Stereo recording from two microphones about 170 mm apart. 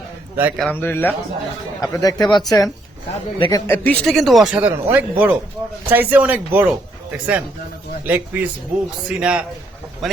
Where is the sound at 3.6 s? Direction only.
10° left (ahead or behind); by 6.7 s 10° right (ahead or behind).